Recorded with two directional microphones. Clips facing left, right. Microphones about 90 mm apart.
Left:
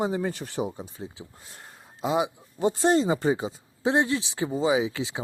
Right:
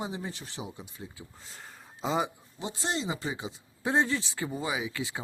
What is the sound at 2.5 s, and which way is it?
Speech, 50° left (ahead or behind).